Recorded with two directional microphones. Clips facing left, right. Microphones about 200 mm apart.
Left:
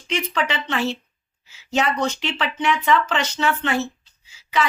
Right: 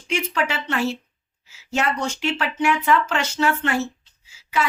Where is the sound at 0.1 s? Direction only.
5° right (ahead or behind).